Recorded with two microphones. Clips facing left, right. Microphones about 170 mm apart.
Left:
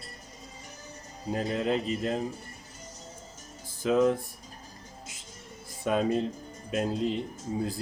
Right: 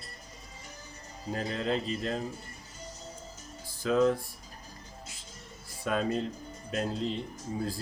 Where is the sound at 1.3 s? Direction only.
20° left (ahead or behind).